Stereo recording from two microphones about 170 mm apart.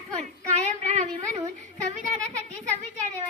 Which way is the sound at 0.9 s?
40° right (ahead or behind).